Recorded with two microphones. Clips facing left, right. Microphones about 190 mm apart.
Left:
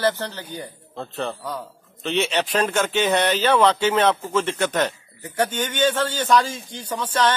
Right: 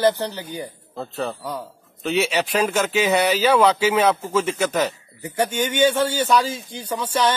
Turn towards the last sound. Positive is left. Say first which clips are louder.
# right 1 dB
turn(degrees=-10)  # may be behind; listen again after turning